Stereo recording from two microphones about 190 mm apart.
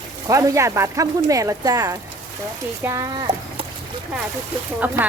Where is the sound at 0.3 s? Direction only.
15° right (ahead or behind).